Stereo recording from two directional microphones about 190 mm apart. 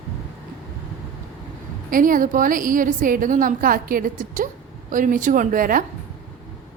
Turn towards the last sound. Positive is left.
turn(degrees=-45)  # may be behind; listen again after turning